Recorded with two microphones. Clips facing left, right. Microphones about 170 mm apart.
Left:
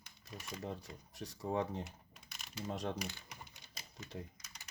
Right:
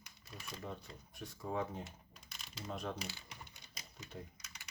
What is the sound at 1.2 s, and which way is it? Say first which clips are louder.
Speech: left 3 dB; 35° left (ahead or behind).